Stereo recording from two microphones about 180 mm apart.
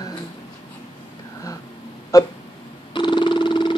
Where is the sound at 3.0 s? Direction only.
25° left (ahead or behind).